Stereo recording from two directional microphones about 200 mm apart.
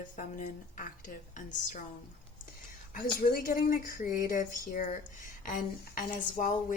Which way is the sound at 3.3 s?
45° left (ahead or behind).